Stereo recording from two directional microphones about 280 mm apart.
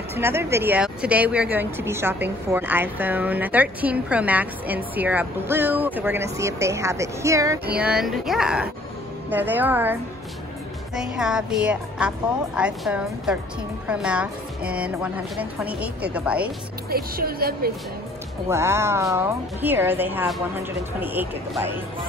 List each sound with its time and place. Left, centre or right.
0.1 s speech: centre
11.0 s a woman's voice: centre
16.9 s speech: right
18.5 s speech: centre